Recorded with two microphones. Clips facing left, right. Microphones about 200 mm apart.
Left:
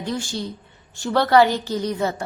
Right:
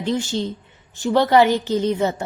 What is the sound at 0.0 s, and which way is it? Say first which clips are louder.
A woman's voice: right 5 dB; 20° right (ahead or behind).